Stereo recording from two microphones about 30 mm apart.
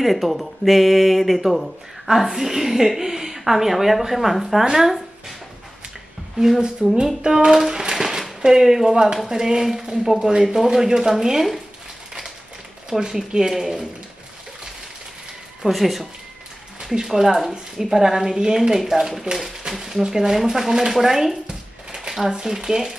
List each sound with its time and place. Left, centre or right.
0.0 s speech: centre
6.8 s speech: right
13.0 s speech: right
13.6 s speech: centre
15.6 s speech: centre
21.5 s a sound: centre
22.3 s speech: centre